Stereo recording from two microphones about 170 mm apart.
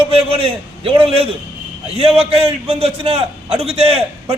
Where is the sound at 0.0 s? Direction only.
35° right (ahead or behind).